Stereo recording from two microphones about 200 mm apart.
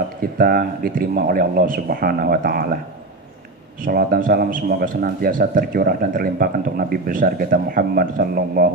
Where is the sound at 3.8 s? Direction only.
50° right (ahead or behind).